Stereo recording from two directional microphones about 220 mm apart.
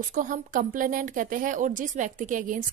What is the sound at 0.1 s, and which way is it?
Speech, 35° right (ahead or behind).